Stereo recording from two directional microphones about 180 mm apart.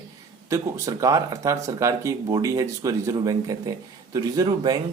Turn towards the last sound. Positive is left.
turn(degrees=-20)  # may be behind; listen again after turning